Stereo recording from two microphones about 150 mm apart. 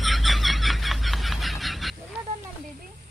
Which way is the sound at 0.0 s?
Centre (ahead or behind).